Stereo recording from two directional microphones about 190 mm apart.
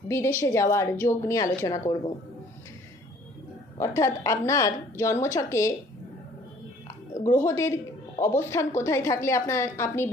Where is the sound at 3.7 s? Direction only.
15° left (ahead or behind).